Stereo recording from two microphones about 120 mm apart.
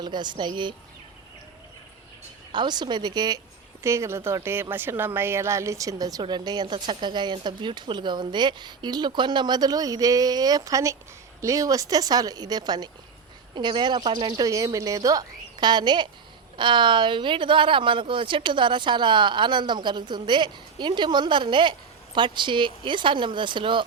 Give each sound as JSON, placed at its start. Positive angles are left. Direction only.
{"t": 0.0, "sound": "speech", "side_deg": -40}
{"t": 2.5, "sound": "speech", "side_deg": -40}
{"t": 3.8, "sound": "speech", "side_deg": -25}